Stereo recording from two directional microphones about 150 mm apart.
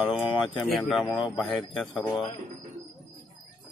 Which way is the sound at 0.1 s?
35° left (ahead or behind).